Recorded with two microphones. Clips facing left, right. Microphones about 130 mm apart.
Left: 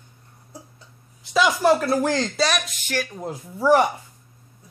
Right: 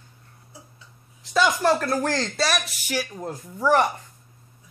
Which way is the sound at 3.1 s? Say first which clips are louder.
Left 1 dB; 5° left (ahead or behind).